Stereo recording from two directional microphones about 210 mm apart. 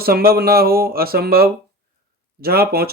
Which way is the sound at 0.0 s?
45° right (ahead or behind).